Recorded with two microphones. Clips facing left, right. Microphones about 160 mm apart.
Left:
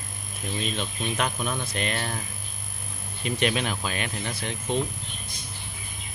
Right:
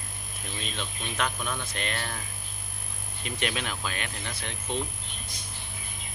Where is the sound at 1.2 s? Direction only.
15° left (ahead or behind).